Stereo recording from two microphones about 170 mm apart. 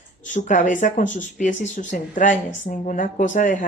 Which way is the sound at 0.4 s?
50° left (ahead or behind).